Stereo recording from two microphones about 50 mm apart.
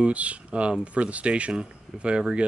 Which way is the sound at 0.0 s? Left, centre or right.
Right.